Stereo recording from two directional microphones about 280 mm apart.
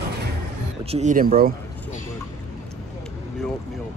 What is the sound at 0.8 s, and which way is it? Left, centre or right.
Speech, right.